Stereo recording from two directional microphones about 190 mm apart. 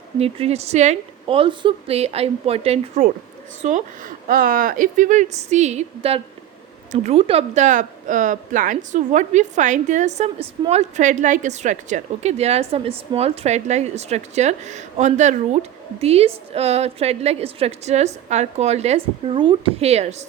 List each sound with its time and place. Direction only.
0.2 s speech: 30° right (ahead or behind)